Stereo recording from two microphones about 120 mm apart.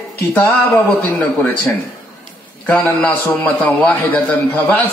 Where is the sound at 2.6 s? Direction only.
15° left (ahead or behind).